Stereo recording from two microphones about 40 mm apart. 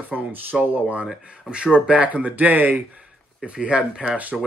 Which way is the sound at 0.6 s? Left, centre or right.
Right.